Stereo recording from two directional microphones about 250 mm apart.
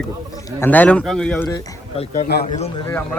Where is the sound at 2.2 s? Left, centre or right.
Left.